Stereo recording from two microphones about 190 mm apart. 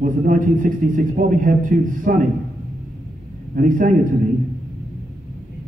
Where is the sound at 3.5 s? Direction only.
45° right (ahead or behind).